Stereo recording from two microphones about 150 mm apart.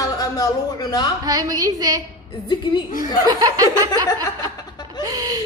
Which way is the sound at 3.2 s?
25° right (ahead or behind).